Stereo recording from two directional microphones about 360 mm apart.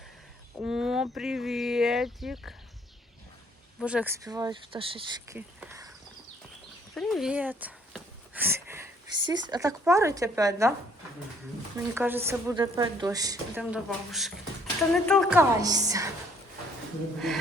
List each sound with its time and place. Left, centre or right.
0.6 s speech: centre
3.8 s a woman's voice: centre
5.5 s a sound: centre
6.9 s a sound: centre
9.5 s a woman's voice: centre
11.9 s a woman's voice: centre
17.2 s speech: centre